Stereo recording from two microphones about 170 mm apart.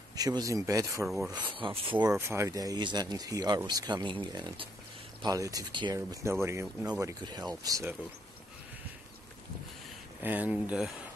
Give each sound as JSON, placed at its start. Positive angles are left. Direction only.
{"t": 0.1, "sound": "speech", "side_deg": -20}
{"t": 1.0, "sound": "speech", "side_deg": 0}
{"t": 1.3, "sound": "speech", "side_deg": -30}
{"t": 2.0, "sound": "speech", "side_deg": -15}
{"t": 6.4, "sound": "speech", "side_deg": -15}
{"t": 7.2, "sound": "speech", "side_deg": -25}
{"t": 10.2, "sound": "speech", "side_deg": -10}